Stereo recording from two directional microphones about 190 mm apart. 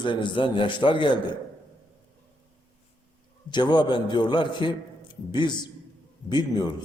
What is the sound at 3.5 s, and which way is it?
A man's voice, 25° left (ahead or behind).